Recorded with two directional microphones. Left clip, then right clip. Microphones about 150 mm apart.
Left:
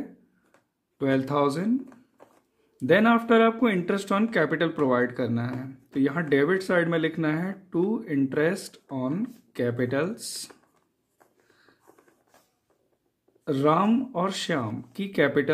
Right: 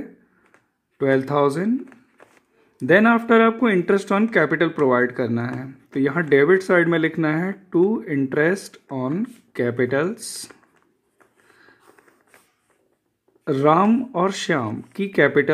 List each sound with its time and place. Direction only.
0.9 s speech: 35° right (ahead or behind)
2.8 s speech: 40° right (ahead or behind)
13.4 s speech: 40° right (ahead or behind)